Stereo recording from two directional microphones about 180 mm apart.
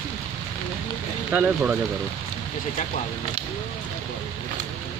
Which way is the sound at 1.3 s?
10° right (ahead or behind).